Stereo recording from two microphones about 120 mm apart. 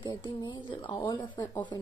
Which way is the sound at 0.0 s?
40° left (ahead or behind).